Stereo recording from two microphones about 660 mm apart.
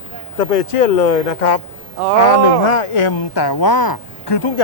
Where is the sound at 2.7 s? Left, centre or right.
Left.